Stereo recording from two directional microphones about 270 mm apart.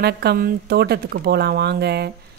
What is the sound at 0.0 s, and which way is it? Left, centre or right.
Speech, right.